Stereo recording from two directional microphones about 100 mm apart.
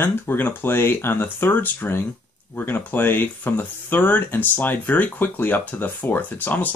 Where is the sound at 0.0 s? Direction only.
20° left (ahead or behind).